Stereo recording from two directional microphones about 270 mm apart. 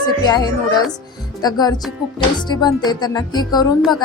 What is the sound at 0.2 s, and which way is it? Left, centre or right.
A woman's voice, centre.